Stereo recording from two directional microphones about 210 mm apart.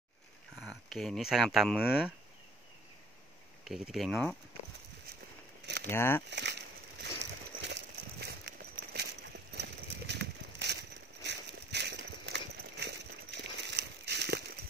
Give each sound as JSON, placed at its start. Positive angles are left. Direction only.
{"t": 0.6, "sound": "speech", "side_deg": 0}
{"t": 3.6, "sound": "speech", "side_deg": 0}
{"t": 5.9, "sound": "speech", "side_deg": 10}
{"t": 6.3, "sound": "a sound", "side_deg": -55}
{"t": 7.6, "sound": "horse", "side_deg": -55}
{"t": 9.5, "sound": "a sound", "side_deg": -50}